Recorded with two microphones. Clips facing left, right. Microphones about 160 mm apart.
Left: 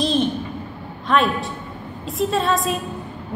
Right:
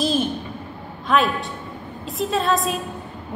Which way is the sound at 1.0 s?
Centre (ahead or behind).